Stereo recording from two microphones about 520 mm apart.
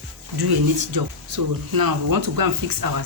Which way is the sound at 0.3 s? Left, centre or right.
Right.